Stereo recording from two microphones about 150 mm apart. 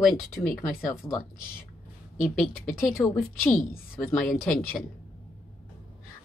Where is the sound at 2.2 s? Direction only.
Centre (ahead or behind).